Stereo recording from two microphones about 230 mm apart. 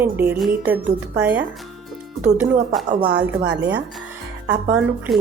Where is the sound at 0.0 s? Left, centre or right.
Centre.